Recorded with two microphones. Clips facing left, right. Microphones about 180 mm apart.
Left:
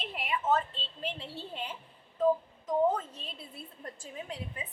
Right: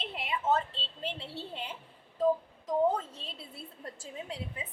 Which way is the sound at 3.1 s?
30° right (ahead or behind).